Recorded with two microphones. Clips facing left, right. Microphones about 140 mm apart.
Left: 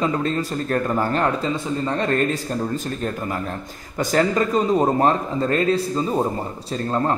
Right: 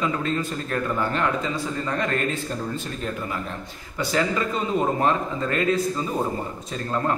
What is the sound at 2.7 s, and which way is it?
A man's voice, 40° left (ahead or behind).